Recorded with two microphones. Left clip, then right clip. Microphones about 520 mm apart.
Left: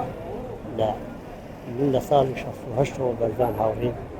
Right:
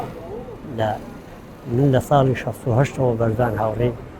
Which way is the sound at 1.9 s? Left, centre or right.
Right.